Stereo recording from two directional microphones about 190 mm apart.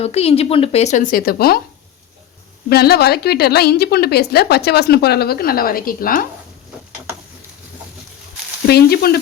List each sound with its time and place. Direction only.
0.0 s speech: 30° left (ahead or behind); by 1.6 s 55° left (ahead or behind)
2.6 s a woman's voice: 55° left (ahead or behind)
8.6 s a woman's voice: 55° left (ahead or behind)